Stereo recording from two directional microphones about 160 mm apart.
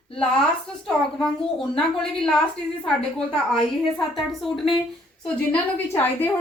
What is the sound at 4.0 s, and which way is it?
Speech, centre (ahead or behind).